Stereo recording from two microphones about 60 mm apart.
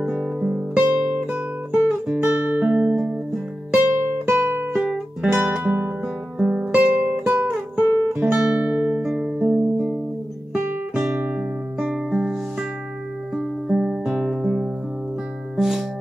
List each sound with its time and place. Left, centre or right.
0.0 s guitar: right
0.7 s music: right
4.1 s music: right
4.9 s music: centre
5.6 s music: right
7.7 s guitar: right
8.2 s music: right
9.4 s music: centre
11.1 s music: right
11.8 s music: centre
15.5 s music: centre